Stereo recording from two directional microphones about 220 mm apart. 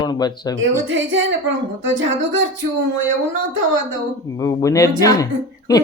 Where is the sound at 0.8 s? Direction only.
60° right (ahead or behind).